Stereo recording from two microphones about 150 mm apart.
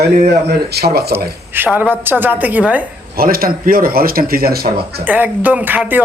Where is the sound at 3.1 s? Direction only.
80° right.